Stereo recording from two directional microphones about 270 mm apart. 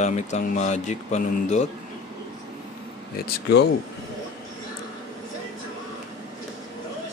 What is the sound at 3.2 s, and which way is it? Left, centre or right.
Speech, left.